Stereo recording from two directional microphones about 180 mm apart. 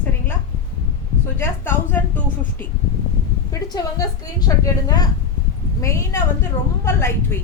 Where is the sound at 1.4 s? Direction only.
10° left (ahead or behind).